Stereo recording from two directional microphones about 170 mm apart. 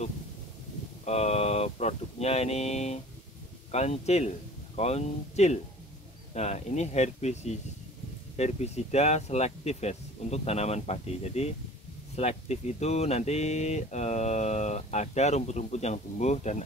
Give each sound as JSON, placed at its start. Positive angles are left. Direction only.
{"t": 1.0, "sound": "speech", "side_deg": 40}